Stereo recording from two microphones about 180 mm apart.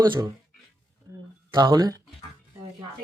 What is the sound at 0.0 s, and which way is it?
Speech, 20° right (ahead or behind).